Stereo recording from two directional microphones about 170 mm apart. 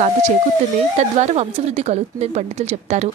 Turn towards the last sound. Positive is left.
turn(degrees=-40)  # may be behind; listen again after turning